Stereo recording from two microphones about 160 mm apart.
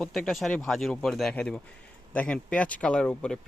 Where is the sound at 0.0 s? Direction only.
Centre (ahead or behind).